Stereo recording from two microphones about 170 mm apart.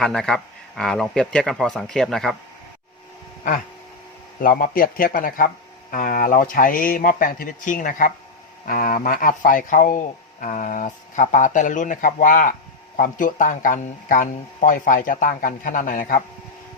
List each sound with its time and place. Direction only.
0.0 s speech: 5° left (ahead or behind)
4.4 s speech: 55° left (ahead or behind)